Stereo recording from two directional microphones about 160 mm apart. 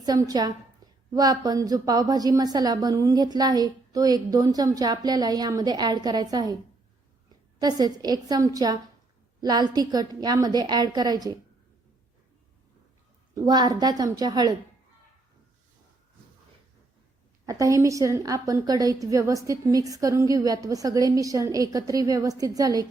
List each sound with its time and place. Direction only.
0.0 s a woman's voice: 25° right (ahead or behind)
7.6 s a woman's voice: 25° right (ahead or behind)
13.3 s a woman's voice: 25° right (ahead or behind)
17.4 s a woman's voice: 20° right (ahead or behind)